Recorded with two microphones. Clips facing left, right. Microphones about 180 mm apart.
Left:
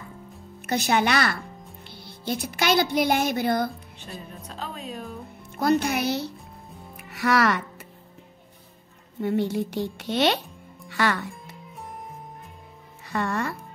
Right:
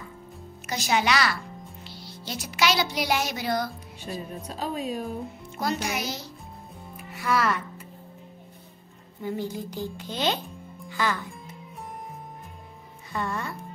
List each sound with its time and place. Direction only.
0.7 s speech: 55° left (ahead or behind)
4.0 s a woman's voice: 10° right (ahead or behind)
5.6 s speech: 60° left (ahead or behind)
7.1 s speech: 75° left (ahead or behind)
9.2 s speech: 70° left (ahead or behind)
13.1 s speech: 75° left (ahead or behind)